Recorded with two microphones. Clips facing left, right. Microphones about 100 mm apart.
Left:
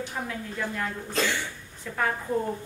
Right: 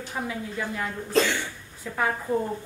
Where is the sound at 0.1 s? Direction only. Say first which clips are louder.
Right 2 dB; 5° right (ahead or behind).